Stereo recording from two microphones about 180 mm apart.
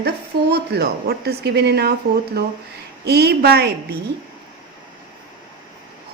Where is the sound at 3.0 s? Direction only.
65° right (ahead or behind).